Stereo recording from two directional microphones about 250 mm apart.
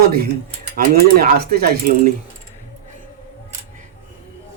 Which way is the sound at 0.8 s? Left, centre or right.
Right.